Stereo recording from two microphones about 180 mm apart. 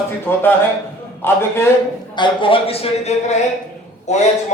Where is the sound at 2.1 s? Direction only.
25° left (ahead or behind).